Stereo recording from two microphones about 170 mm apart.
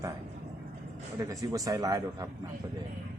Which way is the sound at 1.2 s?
20° right (ahead or behind).